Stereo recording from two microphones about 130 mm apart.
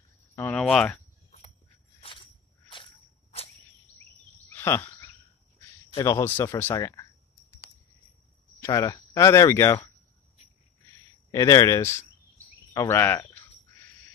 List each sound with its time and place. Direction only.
0.4 s speech: 10° left (ahead or behind)
2.0 s walk: 45° left (ahead or behind)
4.5 s a sound: 20° left (ahead or behind)
5.9 s speech: 25° left (ahead or behind)
8.5 s speech: 25° left (ahead or behind)
11.3 s speech: 25° left (ahead or behind)